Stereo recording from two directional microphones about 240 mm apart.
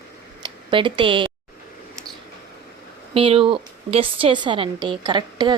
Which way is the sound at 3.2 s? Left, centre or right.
Right.